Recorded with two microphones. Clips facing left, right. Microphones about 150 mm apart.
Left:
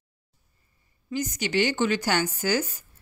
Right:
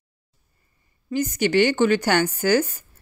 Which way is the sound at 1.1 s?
55° right (ahead or behind).